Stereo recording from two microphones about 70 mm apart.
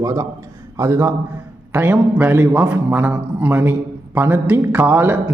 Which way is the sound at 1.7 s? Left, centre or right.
Right.